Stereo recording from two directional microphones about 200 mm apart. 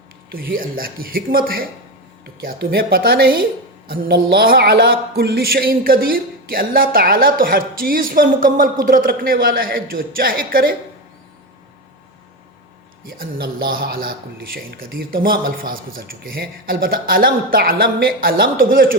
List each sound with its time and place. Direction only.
0.3 s a man's voice: 45° right (ahead or behind)
13.1 s a man's voice: 45° right (ahead or behind)